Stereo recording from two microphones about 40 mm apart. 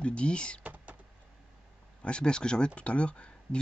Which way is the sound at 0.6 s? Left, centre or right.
Right.